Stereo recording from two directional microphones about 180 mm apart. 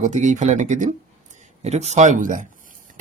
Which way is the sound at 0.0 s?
40° right (ahead or behind).